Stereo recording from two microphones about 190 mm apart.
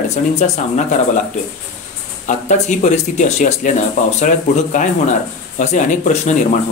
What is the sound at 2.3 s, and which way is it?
Speech, 40° left (ahead or behind).